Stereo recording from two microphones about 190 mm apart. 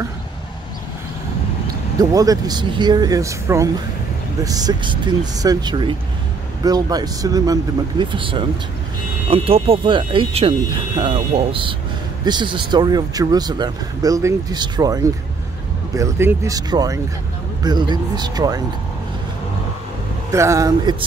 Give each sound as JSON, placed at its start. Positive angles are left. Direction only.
{"t": 2.0, "sound": "speech", "side_deg": -20}
{"t": 20.2, "sound": "speech", "side_deg": -15}